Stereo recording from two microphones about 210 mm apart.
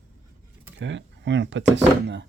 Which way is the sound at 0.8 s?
60° right (ahead or behind).